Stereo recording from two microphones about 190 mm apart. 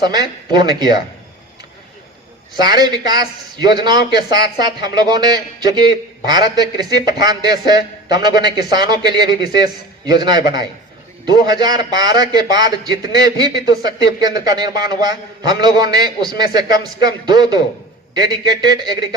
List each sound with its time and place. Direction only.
0.0 s a man's voice: 20° right (ahead or behind)
2.6 s a man's voice: 20° right (ahead or behind)